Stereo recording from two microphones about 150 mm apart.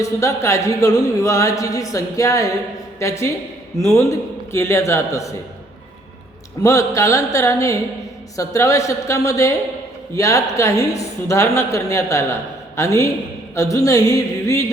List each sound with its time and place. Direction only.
0.0 s a woman's voice: 20° left (ahead or behind)
6.6 s a woman's voice: 20° left (ahead or behind)